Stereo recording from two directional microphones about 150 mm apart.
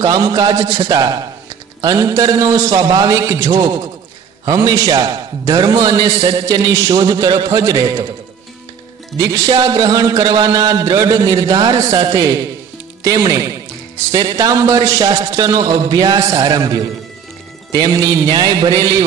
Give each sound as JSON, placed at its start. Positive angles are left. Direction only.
{"t": 0.0, "sound": "a man's voice", "side_deg": -25}
{"t": 9.3, "sound": "a man's voice", "side_deg": -25}